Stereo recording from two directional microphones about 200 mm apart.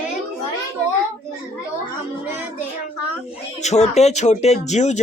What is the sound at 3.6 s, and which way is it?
Speech, 35° left (ahead or behind).